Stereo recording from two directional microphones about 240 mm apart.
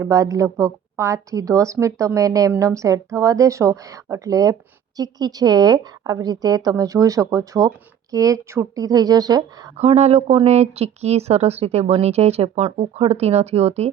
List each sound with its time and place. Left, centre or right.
0.0 s a woman's voice: centre
9.7 s speech: right